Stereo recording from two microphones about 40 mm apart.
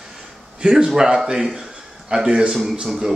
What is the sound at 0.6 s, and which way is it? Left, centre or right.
A man's voice, right.